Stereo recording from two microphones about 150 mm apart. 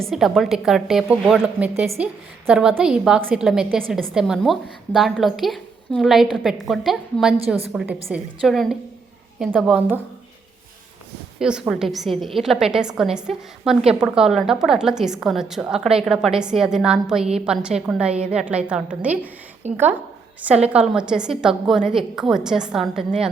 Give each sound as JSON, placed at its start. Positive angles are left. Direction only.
{"t": 0.0, "sound": "a woman's voice", "side_deg": 0}
{"t": 7.3, "sound": "a woman's voice", "side_deg": -40}
{"t": 7.7, "sound": "a woman's voice", "side_deg": 0}
{"t": 11.3, "sound": "a woman's voice", "side_deg": -5}